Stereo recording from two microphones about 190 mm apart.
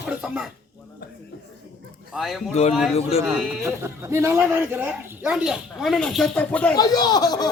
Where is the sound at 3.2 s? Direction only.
5° right (ahead or behind).